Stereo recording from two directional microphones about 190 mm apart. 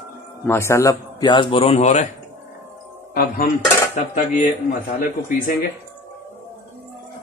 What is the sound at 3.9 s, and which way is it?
Dishes, 40° left (ahead or behind).